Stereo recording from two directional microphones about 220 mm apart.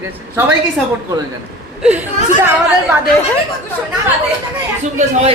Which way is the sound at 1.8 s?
5° right (ahead or behind).